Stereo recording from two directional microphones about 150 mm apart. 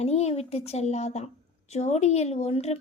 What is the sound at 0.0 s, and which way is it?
A woman's voice, 45° left (ahead or behind).